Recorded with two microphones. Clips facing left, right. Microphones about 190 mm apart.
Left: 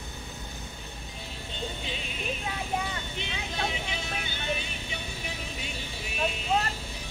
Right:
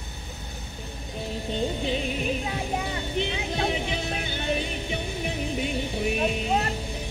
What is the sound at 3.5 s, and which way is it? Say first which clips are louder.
Music: right 4 dB; 60° right (ahead or behind).